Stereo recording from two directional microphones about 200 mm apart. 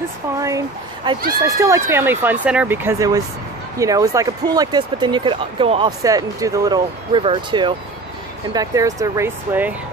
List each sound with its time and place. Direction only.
0.4 s speech: 15° right (ahead or behind)